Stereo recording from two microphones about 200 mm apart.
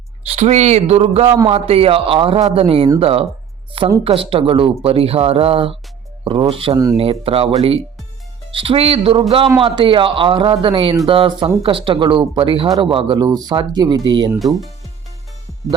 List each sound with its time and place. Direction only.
0.3 s speech: 35° right (ahead or behind)
8.5 s speech: 30° right (ahead or behind)